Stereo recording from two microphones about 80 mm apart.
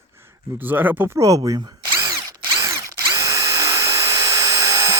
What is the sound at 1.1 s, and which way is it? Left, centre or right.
Speech, right.